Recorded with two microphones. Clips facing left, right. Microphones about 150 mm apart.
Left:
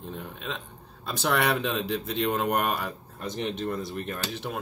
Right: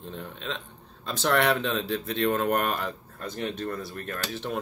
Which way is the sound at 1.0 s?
10° left (ahead or behind).